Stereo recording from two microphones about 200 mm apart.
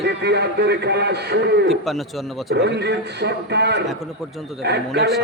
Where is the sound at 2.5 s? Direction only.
55° right (ahead or behind).